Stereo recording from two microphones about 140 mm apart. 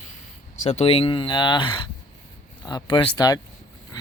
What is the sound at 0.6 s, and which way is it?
Speech, 50° left (ahead or behind).